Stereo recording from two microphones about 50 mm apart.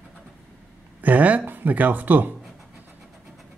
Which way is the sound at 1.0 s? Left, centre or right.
Right.